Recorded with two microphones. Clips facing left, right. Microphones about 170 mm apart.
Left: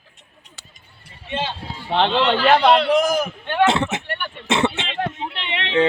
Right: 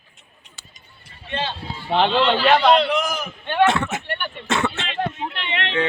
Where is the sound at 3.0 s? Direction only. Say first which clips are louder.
Left 7 dB; 40° left (ahead or behind).